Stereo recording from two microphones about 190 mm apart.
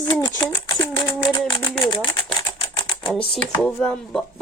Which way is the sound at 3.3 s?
5° left (ahead or behind).